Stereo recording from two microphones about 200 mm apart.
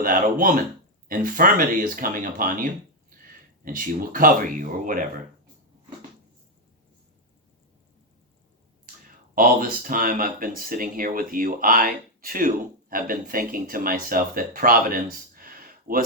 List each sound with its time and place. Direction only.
0.0 s speech: 45° right (ahead or behind)
9.3 s speech: 45° right (ahead or behind)